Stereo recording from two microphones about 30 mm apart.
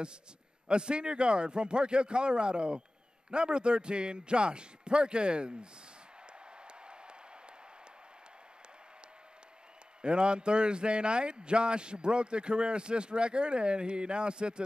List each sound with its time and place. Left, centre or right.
0.7 s a man's voice: right
6.6 s a sound: right
10.0 s a man's voice: right